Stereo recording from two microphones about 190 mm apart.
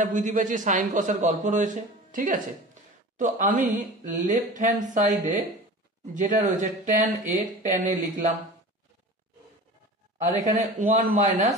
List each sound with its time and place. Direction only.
0.0 s a man's voice: 45° right (ahead or behind)
10.1 s a man's voice: 40° right (ahead or behind)